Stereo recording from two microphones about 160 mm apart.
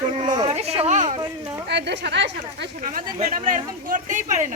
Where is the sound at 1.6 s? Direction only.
90° right.